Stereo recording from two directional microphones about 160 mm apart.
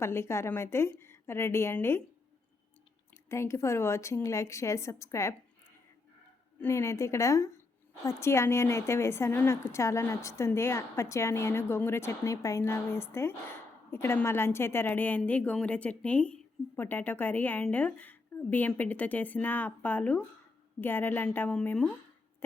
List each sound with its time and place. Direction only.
0.0 s a woman's voice: 15° left (ahead or behind)
3.2 s a woman's voice: 15° left (ahead or behind)
6.6 s a woman's voice: 15° left (ahead or behind)